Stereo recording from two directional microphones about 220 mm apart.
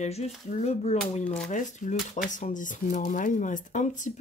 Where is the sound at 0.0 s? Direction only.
30° left (ahead or behind).